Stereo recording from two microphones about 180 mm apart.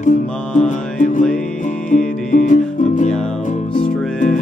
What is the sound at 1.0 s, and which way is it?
Music, 45° left (ahead or behind).